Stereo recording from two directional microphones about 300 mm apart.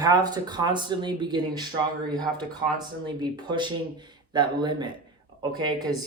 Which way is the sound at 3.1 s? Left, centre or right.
Centre.